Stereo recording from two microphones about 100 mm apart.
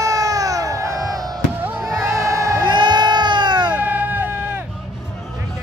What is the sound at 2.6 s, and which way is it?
Crowd, 50° right (ahead or behind).